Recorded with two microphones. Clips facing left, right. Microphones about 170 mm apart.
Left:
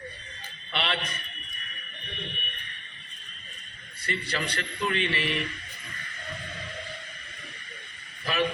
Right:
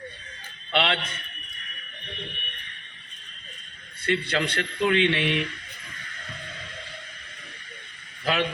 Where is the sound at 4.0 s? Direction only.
65° right (ahead or behind).